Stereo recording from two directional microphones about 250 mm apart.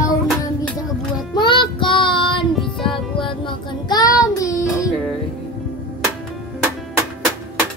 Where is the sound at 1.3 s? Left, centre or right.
Centre.